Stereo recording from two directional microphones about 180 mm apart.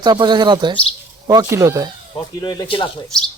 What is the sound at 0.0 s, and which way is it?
Speech, 25° right (ahead or behind).